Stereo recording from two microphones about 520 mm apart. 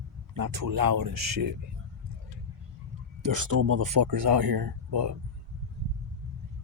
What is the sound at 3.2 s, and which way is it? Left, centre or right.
Speech, right.